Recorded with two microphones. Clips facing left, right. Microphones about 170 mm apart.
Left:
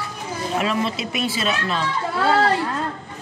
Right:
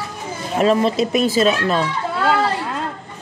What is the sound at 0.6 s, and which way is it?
Speech, 40° right (ahead or behind).